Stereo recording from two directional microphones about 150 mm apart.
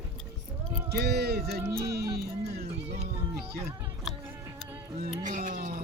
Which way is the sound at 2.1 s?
90° right.